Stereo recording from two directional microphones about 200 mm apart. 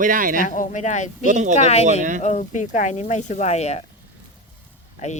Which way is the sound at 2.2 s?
40° left (ahead or behind).